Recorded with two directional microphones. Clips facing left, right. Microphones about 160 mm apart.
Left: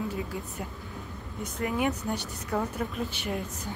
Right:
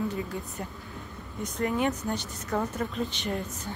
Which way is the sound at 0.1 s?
5° left (ahead or behind).